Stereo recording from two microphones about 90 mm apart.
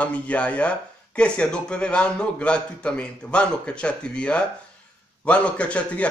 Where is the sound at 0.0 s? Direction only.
15° left (ahead or behind).